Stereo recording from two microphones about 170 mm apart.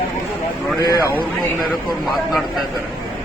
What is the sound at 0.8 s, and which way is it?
Speech, 20° left (ahead or behind).